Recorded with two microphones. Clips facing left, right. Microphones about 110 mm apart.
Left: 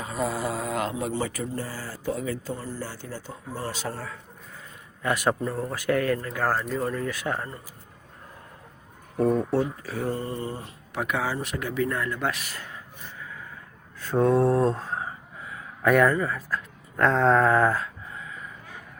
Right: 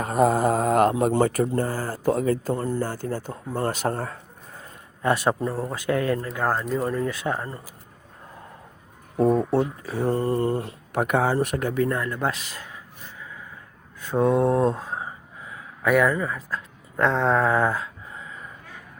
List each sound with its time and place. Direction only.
0.0 s speech: 55° right (ahead or behind)
5.0 s speech: 30° right (ahead or behind)
9.1 s speech: 25° right (ahead or behind)
10.2 s speech: 60° right (ahead or behind); by 11.9 s 45° right (ahead or behind)
11.9 s speech: 30° right (ahead or behind); by 12.8 s 15° right (ahead or behind)
14.1 s mantra: 15° right (ahead or behind)
15.8 s speech: 5° right (ahead or behind)